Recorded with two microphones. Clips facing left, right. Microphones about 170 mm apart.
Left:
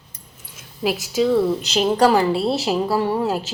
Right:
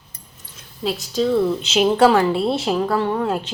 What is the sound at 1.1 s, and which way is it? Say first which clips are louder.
A woman's voice: even; 10° left (ahead or behind).